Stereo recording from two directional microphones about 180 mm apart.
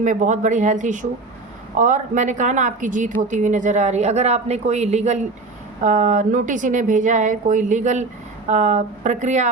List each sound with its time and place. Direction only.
0.0 s a woman's voice: 45° right (ahead or behind)